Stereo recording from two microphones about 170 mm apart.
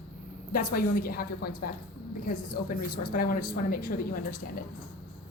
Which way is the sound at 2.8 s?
60° left (ahead or behind).